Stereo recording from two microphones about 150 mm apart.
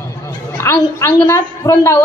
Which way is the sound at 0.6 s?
20° left (ahead or behind).